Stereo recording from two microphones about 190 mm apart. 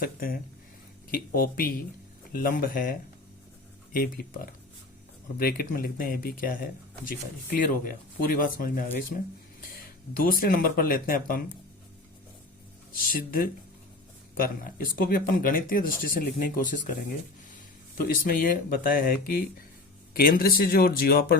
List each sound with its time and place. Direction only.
0.0 s speech: 50° left (ahead or behind)
7.9 s speech: 45° left (ahead or behind)
13.0 s speech: 50° left (ahead or behind)